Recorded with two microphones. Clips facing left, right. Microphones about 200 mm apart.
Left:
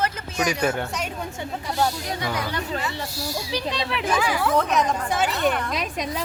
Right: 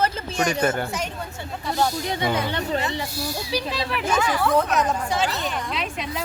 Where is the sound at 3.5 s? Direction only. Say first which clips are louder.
Right 1 dB; 5° right (ahead or behind).